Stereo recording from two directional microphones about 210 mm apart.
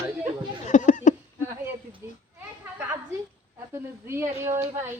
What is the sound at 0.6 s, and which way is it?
Speech, 35° left (ahead or behind).